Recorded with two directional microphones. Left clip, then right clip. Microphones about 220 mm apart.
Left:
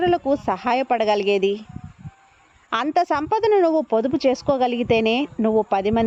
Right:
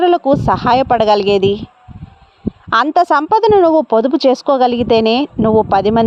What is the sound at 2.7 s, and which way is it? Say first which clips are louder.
A woman's voice: right 9 dB; 20° right (ahead or behind).